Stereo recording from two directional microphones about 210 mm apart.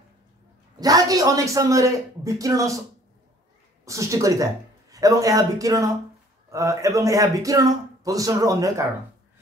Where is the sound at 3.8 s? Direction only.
15° right (ahead or behind).